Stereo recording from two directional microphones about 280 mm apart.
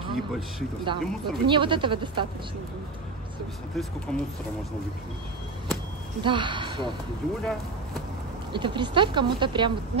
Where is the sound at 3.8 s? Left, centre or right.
Centre.